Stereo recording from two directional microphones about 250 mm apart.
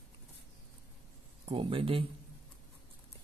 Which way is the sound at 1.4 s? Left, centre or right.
Centre.